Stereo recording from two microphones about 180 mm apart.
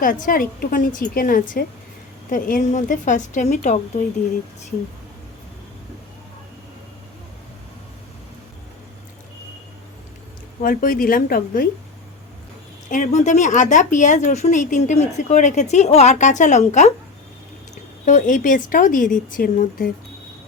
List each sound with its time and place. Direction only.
0.0 s a woman's voice: 50° left (ahead or behind)
10.6 s a woman's voice: 50° left (ahead or behind)
12.9 s speech: 45° left (ahead or behind)
18.0 s a woman's voice: 45° left (ahead or behind)